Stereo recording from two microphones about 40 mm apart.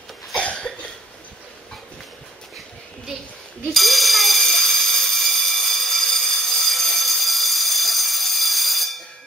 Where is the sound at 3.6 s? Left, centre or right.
Centre.